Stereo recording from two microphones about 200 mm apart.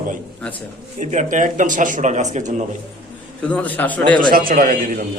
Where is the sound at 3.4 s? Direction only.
5° left (ahead or behind).